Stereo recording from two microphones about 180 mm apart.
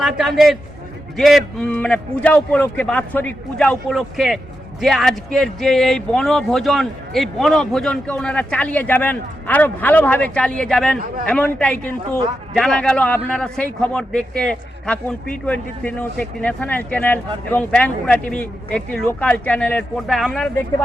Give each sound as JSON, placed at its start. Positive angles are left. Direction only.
{"t": 0.0, "sound": "a man's voice", "side_deg": 0}
{"t": 10.9, "sound": "a man's voice", "side_deg": -50}
{"t": 11.3, "sound": "a man's voice", "side_deg": 5}